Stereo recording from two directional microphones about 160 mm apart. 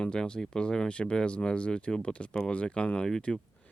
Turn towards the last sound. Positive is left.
turn(degrees=5)  # may be behind; listen again after turning